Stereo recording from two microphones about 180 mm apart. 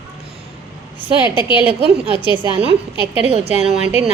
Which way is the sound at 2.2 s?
25° left (ahead or behind).